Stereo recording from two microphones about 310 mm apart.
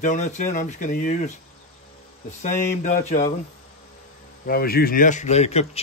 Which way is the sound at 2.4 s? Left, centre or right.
Left.